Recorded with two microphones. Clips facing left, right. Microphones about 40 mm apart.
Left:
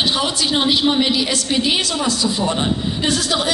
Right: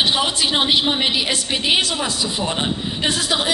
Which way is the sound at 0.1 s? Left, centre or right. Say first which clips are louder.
Even; right.